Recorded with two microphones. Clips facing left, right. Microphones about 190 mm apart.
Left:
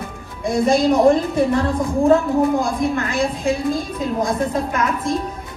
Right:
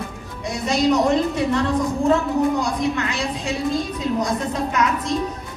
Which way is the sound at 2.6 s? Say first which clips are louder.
Left 2 dB; 50° left (ahead or behind).